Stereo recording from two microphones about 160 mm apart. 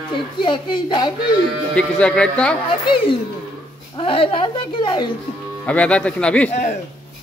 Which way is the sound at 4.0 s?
35° left (ahead or behind).